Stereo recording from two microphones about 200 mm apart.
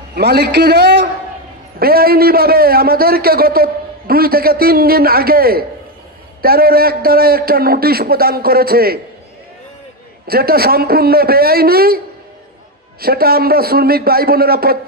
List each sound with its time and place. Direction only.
0.1 s a man's voice: 55° right (ahead or behind)
10.2 s a man's voice: 50° right (ahead or behind)
13.0 s a man's voice: 50° right (ahead or behind)